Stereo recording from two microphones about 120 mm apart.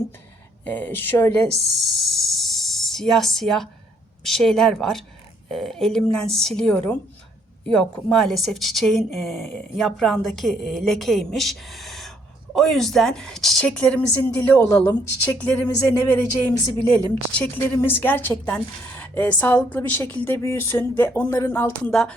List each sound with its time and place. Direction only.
0.7 s a woman's voice: 15° left (ahead or behind)
1.5 s a woman's voice: centre (ahead or behind)
17.7 s a woman's voice: 20° left (ahead or behind)